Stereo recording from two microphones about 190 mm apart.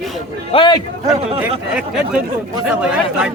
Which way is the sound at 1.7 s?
5° right (ahead or behind).